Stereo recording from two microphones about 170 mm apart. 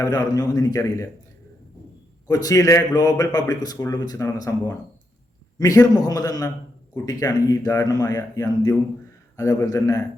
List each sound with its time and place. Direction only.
0.0 s a man's voice: 20° left (ahead or behind)
2.2 s a man's voice: 20° left (ahead or behind)